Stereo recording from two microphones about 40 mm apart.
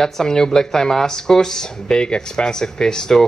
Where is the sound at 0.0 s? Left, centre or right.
Centre.